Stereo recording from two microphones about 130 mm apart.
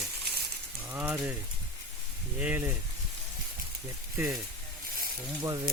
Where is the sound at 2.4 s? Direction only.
15° right (ahead or behind).